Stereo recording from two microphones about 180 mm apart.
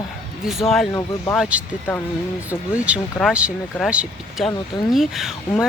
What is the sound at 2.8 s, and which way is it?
Speech, 5° right (ahead or behind).